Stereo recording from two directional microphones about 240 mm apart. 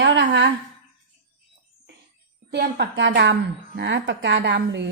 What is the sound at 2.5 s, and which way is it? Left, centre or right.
A woman's voice, right.